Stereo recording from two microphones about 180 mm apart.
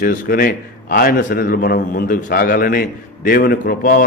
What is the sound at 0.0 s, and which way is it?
A man's voice, 55° left (ahead or behind).